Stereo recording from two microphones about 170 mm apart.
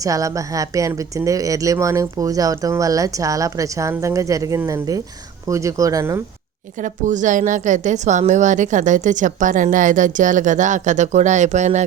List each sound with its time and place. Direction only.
0.0 s speech: 20° right (ahead or behind)
6.7 s a woman's voice: 50° right (ahead or behind)